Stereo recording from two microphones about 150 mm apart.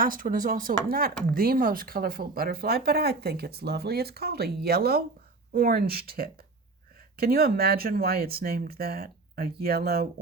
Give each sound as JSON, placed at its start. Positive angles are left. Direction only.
{"t": 0.0, "sound": "speech", "side_deg": -65}